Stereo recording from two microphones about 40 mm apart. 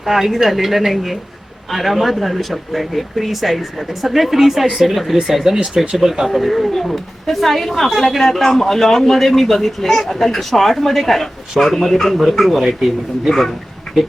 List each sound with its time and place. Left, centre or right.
0.0 s speech: centre
5.5 s speech: right
6.0 s speech: centre